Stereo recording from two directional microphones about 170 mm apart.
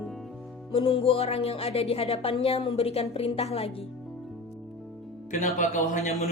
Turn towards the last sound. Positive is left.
turn(degrees=45)  # may be behind; listen again after turning